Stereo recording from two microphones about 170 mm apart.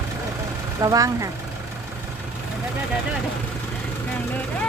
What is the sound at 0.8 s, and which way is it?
Speech, 20° right (ahead or behind).